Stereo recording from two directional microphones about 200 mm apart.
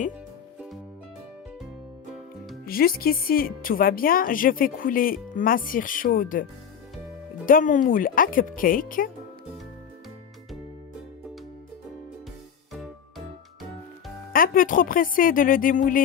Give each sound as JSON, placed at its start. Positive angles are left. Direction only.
{"t": 2.6, "sound": "speech", "side_deg": 50}
{"t": 7.4, "sound": "speech", "side_deg": 40}
{"t": 12.7, "sound": "music", "side_deg": 0}
{"t": 14.3, "sound": "speech", "side_deg": 45}